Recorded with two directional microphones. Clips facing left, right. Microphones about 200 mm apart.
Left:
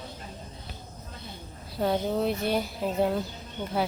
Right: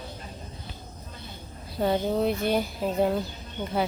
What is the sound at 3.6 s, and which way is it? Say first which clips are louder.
Speech: right 1 dB; centre (ahead or behind).